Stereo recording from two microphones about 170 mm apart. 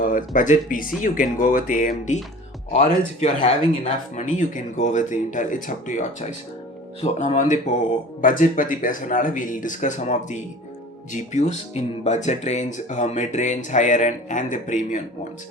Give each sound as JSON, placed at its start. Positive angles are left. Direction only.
{"t": 0.0, "sound": "speech", "side_deg": 50}